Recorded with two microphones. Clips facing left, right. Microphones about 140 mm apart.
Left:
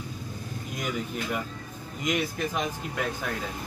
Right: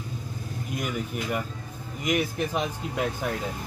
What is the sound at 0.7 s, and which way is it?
Speech, 10° right (ahead or behind).